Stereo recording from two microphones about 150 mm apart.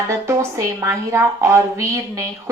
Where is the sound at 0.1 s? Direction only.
20° right (ahead or behind).